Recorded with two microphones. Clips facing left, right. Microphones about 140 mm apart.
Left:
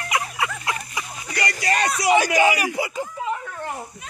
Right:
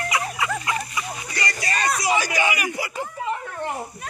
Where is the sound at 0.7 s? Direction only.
70° left (ahead or behind).